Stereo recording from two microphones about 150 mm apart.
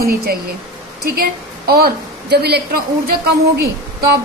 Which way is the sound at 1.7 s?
90° right.